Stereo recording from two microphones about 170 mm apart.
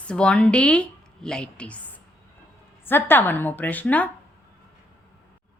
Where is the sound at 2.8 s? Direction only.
10° left (ahead or behind).